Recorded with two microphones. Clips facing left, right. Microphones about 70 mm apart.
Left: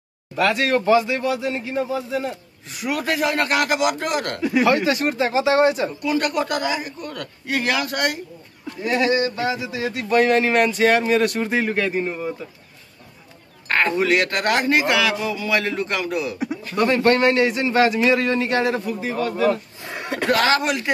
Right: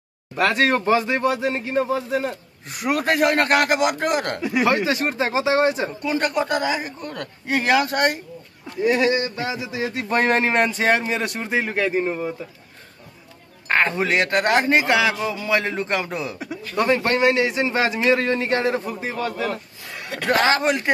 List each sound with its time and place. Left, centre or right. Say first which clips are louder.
0.4 s speech: even; right
8.8 s speech: even; centre
13.7 s speech: left 1 dB; centre
16.7 s speech: left 2 dB; centre
19.8 s a sound: left 5 dB; left
20.2 s speech: right 1 dB; right